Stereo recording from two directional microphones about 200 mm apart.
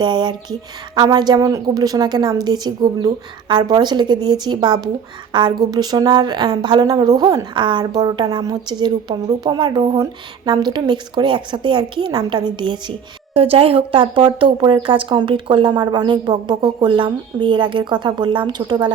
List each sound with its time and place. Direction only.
0.0 s a woman's voice: 20° right (ahead or behind)